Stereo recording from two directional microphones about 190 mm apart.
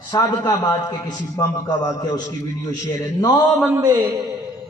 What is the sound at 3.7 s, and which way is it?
Speech, 15° right (ahead or behind).